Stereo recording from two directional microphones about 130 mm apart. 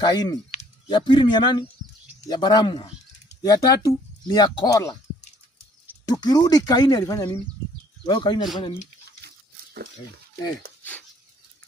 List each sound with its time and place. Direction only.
0.0 s speech: 30° left (ahead or behind)
6.0 s speech: 30° left (ahead or behind)